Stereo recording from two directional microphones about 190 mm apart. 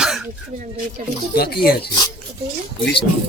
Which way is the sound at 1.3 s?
55° left (ahead or behind).